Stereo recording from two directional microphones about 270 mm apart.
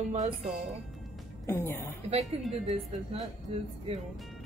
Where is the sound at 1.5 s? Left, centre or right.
Centre.